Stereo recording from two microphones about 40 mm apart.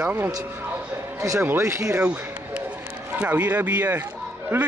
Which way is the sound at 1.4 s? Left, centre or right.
Right.